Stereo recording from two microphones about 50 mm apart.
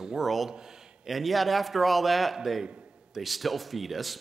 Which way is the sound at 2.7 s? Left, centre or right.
Right.